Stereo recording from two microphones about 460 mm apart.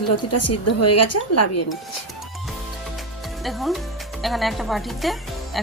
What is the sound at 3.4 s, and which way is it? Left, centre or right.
Speech, centre.